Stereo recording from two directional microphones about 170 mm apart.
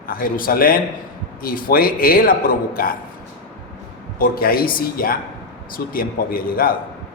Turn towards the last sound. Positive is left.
turn(degrees=55)  # may be behind; listen again after turning